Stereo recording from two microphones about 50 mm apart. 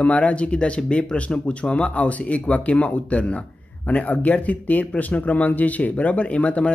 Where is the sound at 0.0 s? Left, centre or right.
Left.